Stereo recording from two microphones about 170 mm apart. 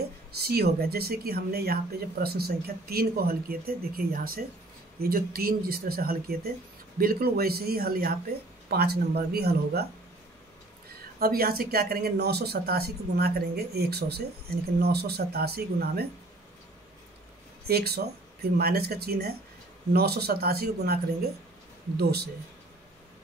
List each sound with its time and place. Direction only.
0.4 s speech: 65° right (ahead or behind)
11.1 s speech: 60° right (ahead or behind)
17.6 s speech: 65° right (ahead or behind)